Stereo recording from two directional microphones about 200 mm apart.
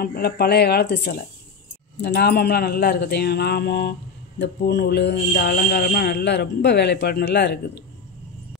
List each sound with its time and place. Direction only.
0.0 s speech: 50° left (ahead or behind)